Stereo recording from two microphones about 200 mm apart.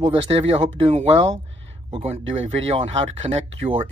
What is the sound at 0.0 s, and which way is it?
Speech, 25° right (ahead or behind).